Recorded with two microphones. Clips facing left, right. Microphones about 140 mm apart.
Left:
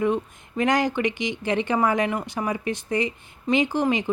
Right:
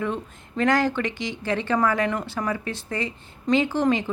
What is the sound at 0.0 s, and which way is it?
A woman's voice, 15° left (ahead or behind).